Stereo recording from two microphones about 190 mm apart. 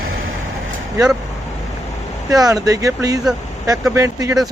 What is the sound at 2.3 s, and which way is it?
Speech, 20° right (ahead or behind).